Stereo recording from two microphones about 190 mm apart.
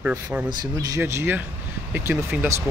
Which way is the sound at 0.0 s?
10° right (ahead or behind).